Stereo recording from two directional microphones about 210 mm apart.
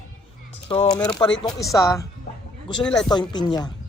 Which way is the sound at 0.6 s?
25° left (ahead or behind).